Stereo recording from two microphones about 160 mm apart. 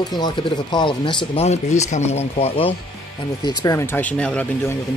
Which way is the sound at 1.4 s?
45° left (ahead or behind).